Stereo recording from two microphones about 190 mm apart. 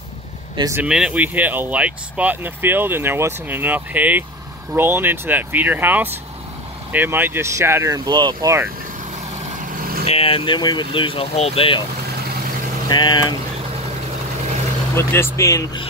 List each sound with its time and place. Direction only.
0.6 s speech: 15° right (ahead or behind)
0.8 s speech: 5° right (ahead or behind)
9.7 s vehicle: 50° right (ahead or behind)
10.0 s speech: 30° left (ahead or behind)
12.8 s speech: 25° left (ahead or behind)
15.0 s speech: 15° left (ahead or behind)